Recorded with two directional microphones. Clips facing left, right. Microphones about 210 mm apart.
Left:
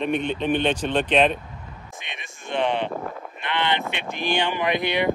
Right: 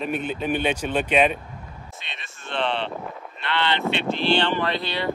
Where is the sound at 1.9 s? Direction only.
15° left (ahead or behind).